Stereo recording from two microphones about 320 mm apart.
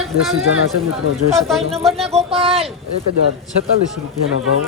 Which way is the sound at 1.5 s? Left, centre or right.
Centre.